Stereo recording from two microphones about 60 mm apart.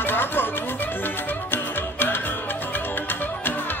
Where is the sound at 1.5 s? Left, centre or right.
Left.